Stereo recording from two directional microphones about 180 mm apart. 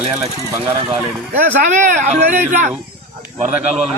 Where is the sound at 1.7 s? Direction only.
40° right (ahead or behind).